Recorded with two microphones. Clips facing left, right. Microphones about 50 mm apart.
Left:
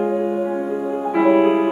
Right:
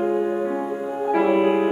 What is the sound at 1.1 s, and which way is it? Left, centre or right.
Music, centre.